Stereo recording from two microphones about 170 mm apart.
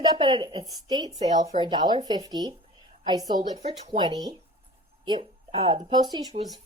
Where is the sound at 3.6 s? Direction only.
40° right (ahead or behind).